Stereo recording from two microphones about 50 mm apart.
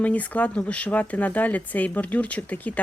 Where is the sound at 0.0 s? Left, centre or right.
Left.